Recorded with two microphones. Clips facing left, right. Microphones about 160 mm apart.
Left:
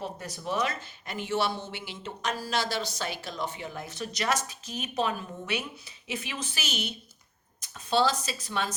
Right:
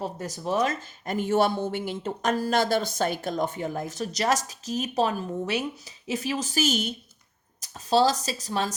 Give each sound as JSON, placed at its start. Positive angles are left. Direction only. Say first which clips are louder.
{"t": 0.0, "sound": "speech", "louder": "right 4 dB", "side_deg": -40}